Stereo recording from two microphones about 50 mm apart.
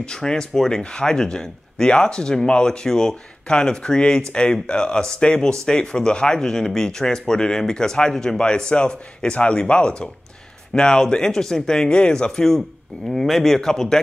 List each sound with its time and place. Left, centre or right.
0.0 s a man's voice: centre